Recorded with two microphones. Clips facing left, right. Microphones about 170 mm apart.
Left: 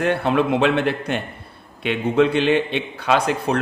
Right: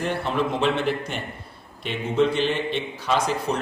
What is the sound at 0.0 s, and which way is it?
A man's voice, 60° left (ahead or behind).